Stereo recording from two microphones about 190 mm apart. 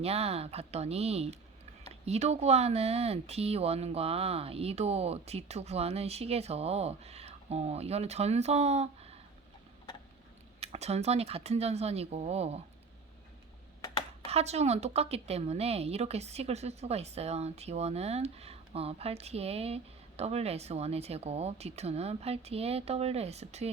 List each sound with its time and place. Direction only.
0.0 s a woman's voice: 35° right (ahead or behind)
10.6 s a woman's voice: 35° right (ahead or behind)
14.3 s a woman's voice: 35° right (ahead or behind)